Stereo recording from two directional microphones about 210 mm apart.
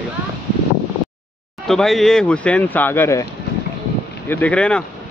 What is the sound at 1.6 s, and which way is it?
Speech, centre (ahead or behind).